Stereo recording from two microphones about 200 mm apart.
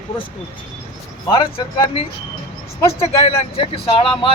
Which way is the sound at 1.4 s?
25° left (ahead or behind).